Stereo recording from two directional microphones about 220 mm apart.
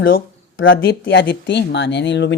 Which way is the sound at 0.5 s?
60° left (ahead or behind).